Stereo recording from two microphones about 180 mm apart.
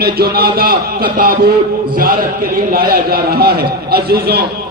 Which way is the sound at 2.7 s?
55° right (ahead or behind).